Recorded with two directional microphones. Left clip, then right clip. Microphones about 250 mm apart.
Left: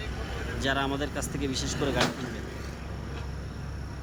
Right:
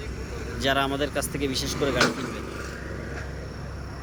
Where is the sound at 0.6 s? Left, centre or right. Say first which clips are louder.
Right 5 dB; centre.